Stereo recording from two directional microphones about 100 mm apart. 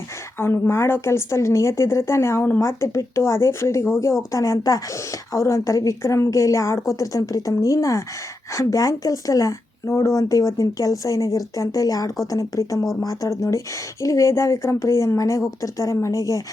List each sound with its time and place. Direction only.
0.3 s a woman's voice: 25° left (ahead or behind)